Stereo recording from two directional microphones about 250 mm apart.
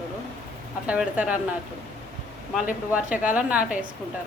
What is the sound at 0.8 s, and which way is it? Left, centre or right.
Speech, centre.